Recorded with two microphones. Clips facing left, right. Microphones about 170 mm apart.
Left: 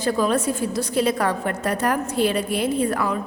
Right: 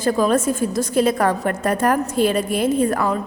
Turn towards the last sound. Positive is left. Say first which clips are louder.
# right 3 dB
turn(degrees=-45)  # may be behind; listen again after turning